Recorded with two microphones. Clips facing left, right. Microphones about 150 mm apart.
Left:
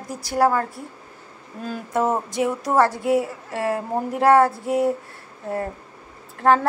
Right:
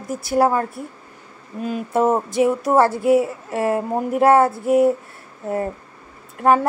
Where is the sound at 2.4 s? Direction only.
25° right (ahead or behind).